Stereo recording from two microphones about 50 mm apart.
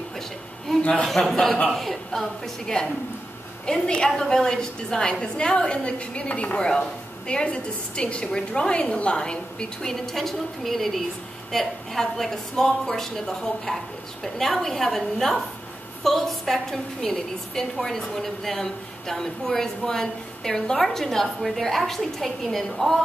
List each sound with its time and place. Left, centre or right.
1.3 s a woman's voice: centre